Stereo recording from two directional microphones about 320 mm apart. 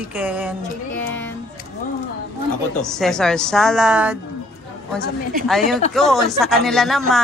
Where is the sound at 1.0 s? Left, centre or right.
Centre.